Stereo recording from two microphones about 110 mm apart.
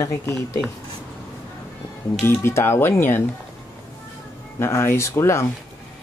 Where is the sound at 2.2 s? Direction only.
20° left (ahead or behind).